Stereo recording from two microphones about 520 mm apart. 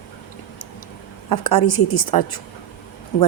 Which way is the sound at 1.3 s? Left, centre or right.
Left.